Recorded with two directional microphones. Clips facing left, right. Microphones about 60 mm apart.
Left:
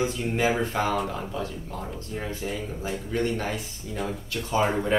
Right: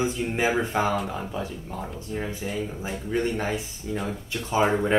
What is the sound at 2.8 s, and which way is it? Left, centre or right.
Speech, centre.